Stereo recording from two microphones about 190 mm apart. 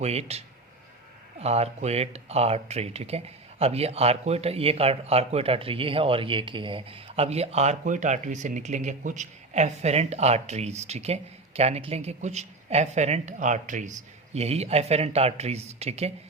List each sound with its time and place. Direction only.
0.0 s speech: 35° right (ahead or behind)